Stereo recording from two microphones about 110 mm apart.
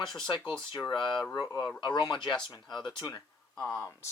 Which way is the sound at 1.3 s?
35° left (ahead or behind).